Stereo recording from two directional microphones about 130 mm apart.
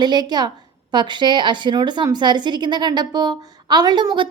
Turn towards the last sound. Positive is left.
turn(degrees=-35)  # may be behind; listen again after turning